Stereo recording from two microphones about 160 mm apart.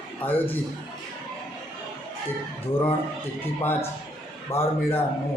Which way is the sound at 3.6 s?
15° left (ahead or behind).